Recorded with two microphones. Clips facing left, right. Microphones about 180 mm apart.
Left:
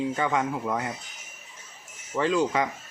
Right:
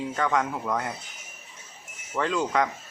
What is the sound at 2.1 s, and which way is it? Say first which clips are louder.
Speech: left 1 dB; 5° left (ahead or behind).